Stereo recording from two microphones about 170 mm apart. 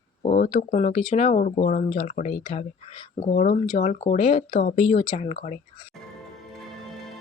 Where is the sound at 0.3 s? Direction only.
50° left (ahead or behind).